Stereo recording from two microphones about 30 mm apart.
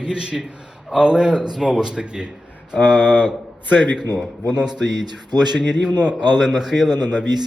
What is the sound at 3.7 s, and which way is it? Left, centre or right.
Speech, left.